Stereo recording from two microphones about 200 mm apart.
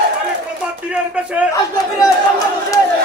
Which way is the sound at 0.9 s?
5° right (ahead or behind).